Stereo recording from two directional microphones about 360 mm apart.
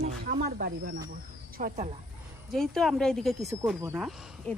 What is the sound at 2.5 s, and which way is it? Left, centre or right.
Speech, centre.